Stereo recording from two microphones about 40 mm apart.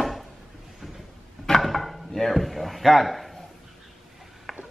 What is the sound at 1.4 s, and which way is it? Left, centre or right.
Drawer open or close, centre.